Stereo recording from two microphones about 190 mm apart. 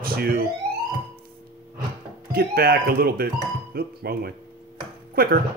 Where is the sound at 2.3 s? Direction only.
55° right (ahead or behind).